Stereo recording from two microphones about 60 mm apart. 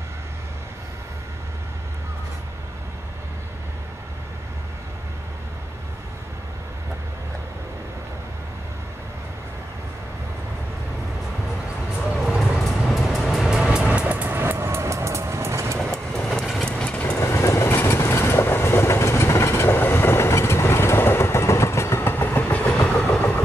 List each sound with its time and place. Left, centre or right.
12.3 s vehicle: centre; by 14.4 s right
14.4 s train: right
15.8 s train: centre
16.6 s train: centre
17.2 s train: left